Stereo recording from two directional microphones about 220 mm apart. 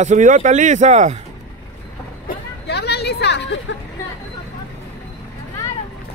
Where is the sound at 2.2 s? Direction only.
45° left (ahead or behind).